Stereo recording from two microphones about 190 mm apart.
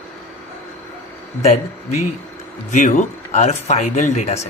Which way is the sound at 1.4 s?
35° left (ahead or behind).